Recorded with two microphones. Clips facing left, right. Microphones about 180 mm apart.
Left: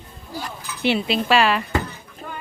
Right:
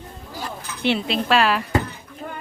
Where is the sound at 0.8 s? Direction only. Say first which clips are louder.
Left 1 dB; 5° left (ahead or behind).